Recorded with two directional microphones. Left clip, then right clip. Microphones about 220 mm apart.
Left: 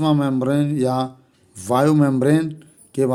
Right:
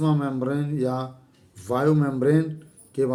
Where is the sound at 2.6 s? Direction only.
55° left (ahead or behind).